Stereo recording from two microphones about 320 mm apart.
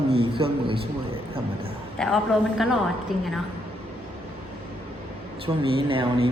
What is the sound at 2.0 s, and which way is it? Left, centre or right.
A man's voice, centre.